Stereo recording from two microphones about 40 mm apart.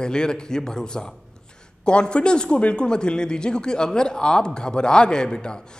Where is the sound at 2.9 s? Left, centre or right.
Left.